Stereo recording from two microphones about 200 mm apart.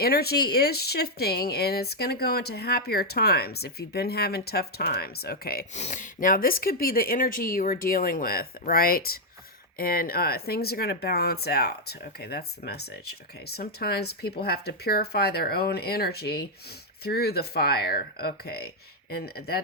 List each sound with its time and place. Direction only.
0.0 s speech: 50° left (ahead or behind)
5.7 s speech: 35° left (ahead or behind); by 19.6 s 50° left (ahead or behind)